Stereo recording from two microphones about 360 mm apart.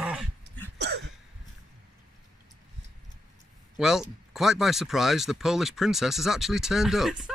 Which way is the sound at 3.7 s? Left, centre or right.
Centre.